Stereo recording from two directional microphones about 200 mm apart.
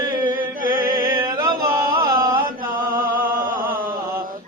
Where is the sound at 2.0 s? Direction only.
15° right (ahead or behind).